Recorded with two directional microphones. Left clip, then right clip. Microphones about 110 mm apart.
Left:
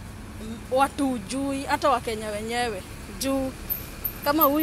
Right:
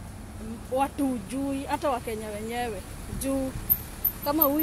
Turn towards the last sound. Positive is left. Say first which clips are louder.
# left 4 dB
turn(degrees=-15)  # may be behind; listen again after turning